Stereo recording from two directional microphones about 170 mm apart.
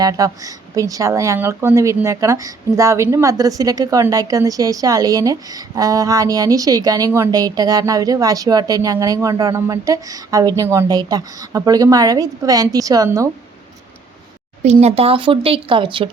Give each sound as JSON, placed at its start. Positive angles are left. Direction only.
{"t": 0.0, "sound": "a woman's voice", "side_deg": -20}
{"t": 14.6, "sound": "speech", "side_deg": -40}